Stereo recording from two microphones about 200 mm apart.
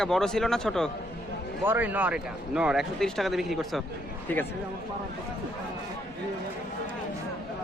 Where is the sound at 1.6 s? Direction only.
10° right (ahead or behind).